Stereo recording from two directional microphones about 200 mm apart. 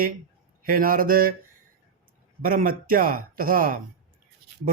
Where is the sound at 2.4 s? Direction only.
45° right (ahead or behind).